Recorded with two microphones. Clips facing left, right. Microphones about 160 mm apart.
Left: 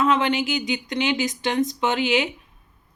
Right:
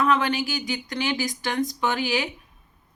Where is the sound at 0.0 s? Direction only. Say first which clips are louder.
Left 2 dB; 20° left (ahead or behind).